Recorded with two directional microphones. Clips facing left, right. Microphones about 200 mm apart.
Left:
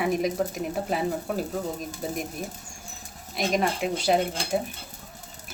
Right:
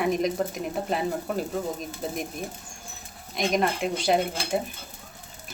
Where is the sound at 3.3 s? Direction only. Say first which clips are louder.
Right 1 dB; centre (ahead or behind).